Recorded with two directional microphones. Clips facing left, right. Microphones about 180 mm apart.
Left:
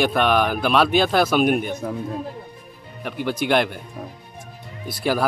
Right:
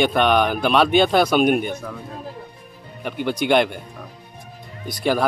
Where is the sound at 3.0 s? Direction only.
Centre (ahead or behind).